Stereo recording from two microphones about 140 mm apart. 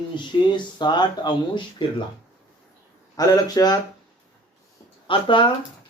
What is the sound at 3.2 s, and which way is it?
Speech, 25° left (ahead or behind).